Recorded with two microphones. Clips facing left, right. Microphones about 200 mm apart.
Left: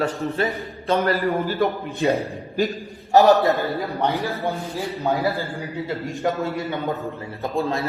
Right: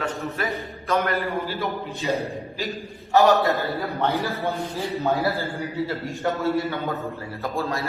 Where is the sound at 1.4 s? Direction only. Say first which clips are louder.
Left 6 dB; 50° left (ahead or behind).